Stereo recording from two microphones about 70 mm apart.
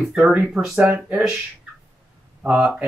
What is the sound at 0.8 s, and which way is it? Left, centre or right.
Speech, right.